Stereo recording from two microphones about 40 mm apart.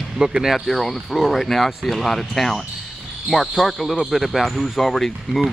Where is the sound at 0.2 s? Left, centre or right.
Centre.